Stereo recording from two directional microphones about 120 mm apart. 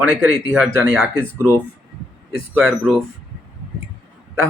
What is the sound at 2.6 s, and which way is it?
Speech, centre (ahead or behind).